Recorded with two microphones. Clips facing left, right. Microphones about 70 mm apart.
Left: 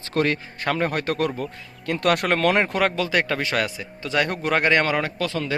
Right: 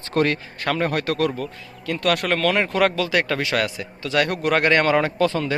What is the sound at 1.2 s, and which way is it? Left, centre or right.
Speech, left.